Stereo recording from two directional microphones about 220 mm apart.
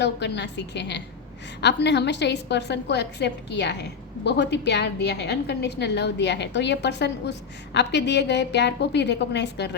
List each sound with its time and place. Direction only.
0.0 s a woman's voice: 50° left (ahead or behind)